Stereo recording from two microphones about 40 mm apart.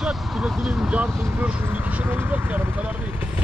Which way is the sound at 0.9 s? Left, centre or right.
Right.